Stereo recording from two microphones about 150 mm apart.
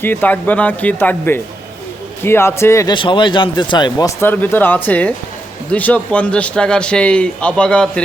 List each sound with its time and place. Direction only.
0.0 s a man's voice: 15° left (ahead or behind)
2.9 s a man's voice: 35° left (ahead or behind); by 8.0 s 5° left (ahead or behind)